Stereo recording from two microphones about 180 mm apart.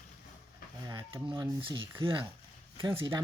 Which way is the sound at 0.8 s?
20° right (ahead or behind).